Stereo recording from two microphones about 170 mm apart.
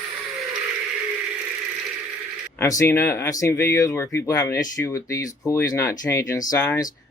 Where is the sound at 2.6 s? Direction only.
15° left (ahead or behind).